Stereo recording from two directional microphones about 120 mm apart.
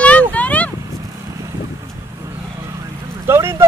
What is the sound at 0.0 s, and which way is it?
Vehicle, 10° left (ahead or behind).